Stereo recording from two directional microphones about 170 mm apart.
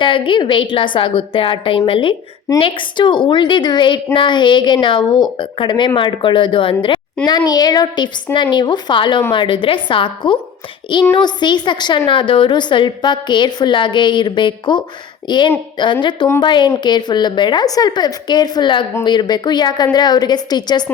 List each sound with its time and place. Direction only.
0.0 s a woman's voice: 30° left (ahead or behind)